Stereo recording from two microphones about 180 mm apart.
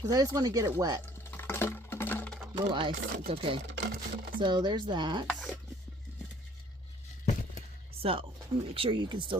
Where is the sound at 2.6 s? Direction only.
25° right (ahead or behind).